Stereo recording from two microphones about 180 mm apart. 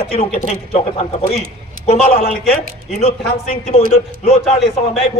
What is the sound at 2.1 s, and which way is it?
Speech, 50° left (ahead or behind).